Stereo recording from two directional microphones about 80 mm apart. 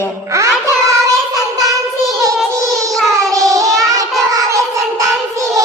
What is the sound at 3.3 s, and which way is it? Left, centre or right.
Child singing, right.